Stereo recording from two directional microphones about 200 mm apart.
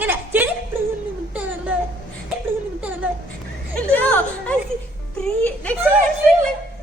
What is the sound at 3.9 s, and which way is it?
Speech, 5° left (ahead or behind).